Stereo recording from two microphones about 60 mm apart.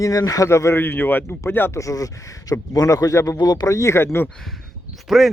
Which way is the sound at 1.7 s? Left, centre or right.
Left.